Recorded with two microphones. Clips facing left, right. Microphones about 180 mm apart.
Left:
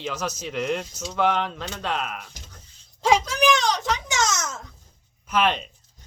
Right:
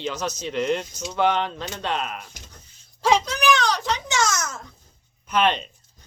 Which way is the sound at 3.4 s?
20° left (ahead or behind).